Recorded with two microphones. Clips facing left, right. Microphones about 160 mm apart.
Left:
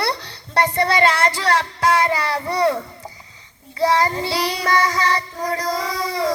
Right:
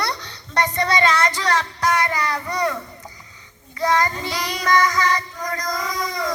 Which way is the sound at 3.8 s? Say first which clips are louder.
Left 2 dB; 30° left (ahead or behind).